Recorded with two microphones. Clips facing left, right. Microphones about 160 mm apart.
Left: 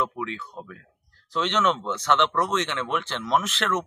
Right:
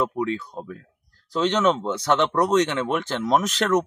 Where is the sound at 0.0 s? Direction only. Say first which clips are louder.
Right 5 dB; 40° right (ahead or behind).